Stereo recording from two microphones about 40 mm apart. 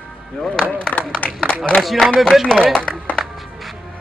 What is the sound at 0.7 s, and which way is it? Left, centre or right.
Speech, left.